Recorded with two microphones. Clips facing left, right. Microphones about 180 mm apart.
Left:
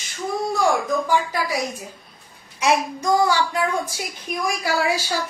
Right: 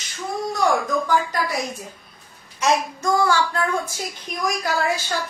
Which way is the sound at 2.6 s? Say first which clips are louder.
Left 1 dB; 10° left (ahead or behind).